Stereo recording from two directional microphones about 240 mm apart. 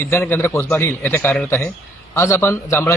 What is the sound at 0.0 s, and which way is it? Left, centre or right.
Speech, centre.